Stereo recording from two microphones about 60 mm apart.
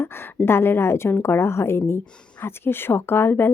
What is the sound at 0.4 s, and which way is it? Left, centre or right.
A woman's voice, left.